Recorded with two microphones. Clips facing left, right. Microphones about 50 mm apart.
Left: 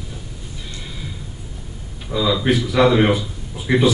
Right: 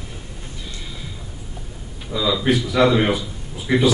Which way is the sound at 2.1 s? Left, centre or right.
Centre.